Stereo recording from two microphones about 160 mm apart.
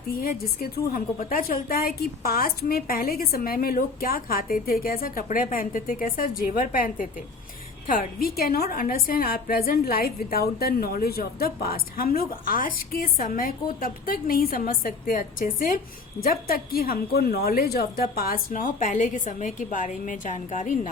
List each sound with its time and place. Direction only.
0.1 s a woman's voice: 65° left (ahead or behind)